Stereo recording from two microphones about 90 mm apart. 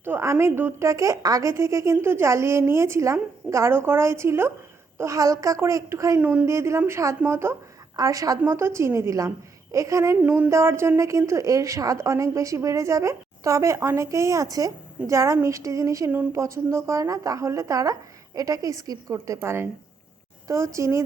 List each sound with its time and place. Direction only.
0.0 s a woman's voice: 30° right (ahead or behind)
6.1 s speech: 20° right (ahead or behind)
6.5 s a woman's voice: 30° right (ahead or behind)
7.9 s a woman's voice: 40° right (ahead or behind)
10.2 s a sound: 15° right (ahead or behind)
10.5 s a woman's voice: 30° right (ahead or behind)